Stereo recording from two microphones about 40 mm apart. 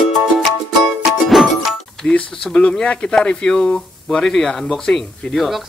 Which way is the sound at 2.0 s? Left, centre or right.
Left.